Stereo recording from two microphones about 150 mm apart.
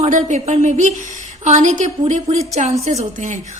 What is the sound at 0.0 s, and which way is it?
A woman's voice, 55° right (ahead or behind).